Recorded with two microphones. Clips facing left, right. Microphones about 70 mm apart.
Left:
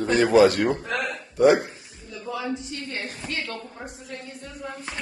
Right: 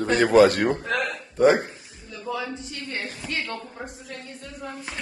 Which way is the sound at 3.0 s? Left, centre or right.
Left.